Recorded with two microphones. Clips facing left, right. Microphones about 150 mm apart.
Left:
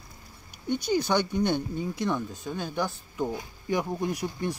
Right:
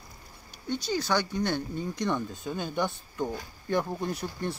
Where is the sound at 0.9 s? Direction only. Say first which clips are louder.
Left 3 dB; 20° left (ahead or behind).